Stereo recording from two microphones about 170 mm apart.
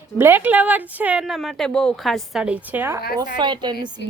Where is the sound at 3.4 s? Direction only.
25° right (ahead or behind).